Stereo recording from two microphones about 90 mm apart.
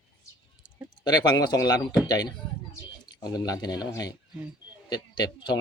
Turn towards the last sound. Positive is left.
turn(degrees=50)  # may be behind; listen again after turning